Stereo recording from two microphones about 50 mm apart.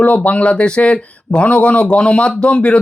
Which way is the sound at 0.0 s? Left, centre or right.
Left.